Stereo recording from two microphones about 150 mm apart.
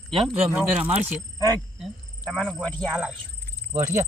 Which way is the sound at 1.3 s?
25° right (ahead or behind).